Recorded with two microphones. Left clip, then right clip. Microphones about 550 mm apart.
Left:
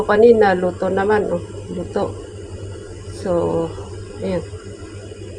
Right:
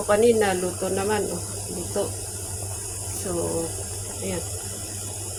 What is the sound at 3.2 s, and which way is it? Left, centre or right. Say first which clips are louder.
Speech: left 11 dB; right.